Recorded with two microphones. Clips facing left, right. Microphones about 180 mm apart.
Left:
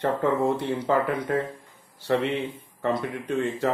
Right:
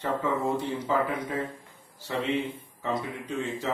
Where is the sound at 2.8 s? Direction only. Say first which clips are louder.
Left 5 dB; 60° left (ahead or behind).